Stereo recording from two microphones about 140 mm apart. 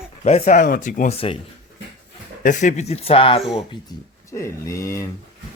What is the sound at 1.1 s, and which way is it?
Speech, 40° left (ahead or behind).